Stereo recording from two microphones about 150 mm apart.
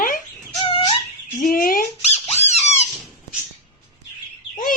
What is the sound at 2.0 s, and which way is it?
Squeak, 45° left (ahead or behind).